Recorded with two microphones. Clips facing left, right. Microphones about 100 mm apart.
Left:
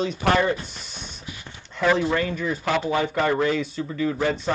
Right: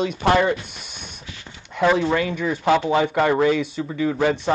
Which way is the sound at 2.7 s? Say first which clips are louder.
Right 6 dB; 20° right (ahead or behind).